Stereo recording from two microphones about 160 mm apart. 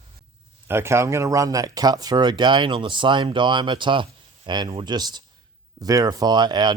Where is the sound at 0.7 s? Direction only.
15° right (ahead or behind).